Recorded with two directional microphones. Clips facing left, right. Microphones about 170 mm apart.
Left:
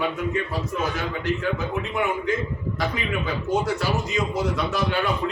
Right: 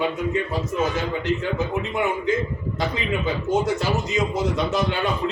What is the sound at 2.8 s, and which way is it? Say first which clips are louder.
A man's voice: right 2 dB; 20° right (ahead or behind).